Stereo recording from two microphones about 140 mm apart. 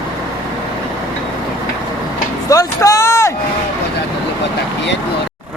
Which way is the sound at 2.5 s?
25° left (ahead or behind).